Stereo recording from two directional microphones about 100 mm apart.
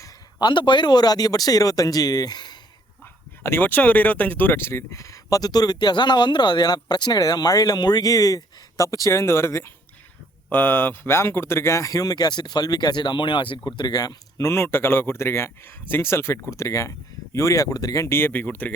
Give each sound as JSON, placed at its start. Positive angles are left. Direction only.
{"t": 0.0, "sound": "a man's voice", "side_deg": 45}
{"t": 3.4, "sound": "speech", "side_deg": 20}